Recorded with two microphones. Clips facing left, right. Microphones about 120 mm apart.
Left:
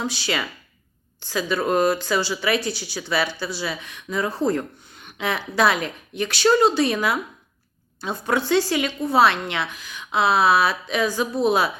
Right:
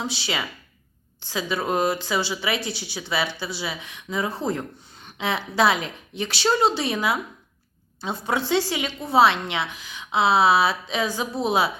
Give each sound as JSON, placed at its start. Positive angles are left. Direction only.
{"t": 0.0, "sound": "a woman's voice", "side_deg": -25}